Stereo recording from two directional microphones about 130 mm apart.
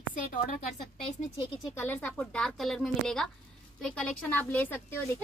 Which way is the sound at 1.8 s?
15° left (ahead or behind).